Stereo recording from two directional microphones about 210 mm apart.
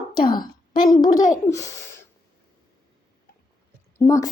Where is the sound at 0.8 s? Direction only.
20° left (ahead or behind).